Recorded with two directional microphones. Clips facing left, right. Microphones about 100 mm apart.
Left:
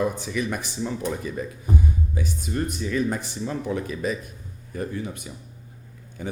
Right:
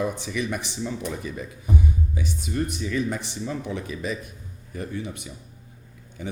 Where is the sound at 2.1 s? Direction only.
45° left (ahead or behind).